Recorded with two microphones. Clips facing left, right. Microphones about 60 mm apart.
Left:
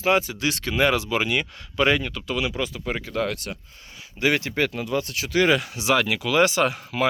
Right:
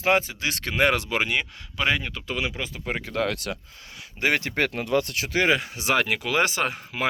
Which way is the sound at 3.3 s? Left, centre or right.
Right.